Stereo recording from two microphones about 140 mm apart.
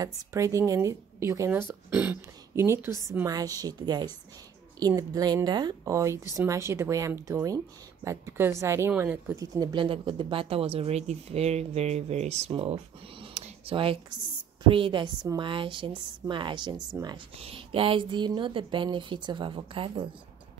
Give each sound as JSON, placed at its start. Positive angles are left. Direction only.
{"t": 0.0, "sound": "speech", "side_deg": -20}
{"t": 17.4, "sound": "speech", "side_deg": -40}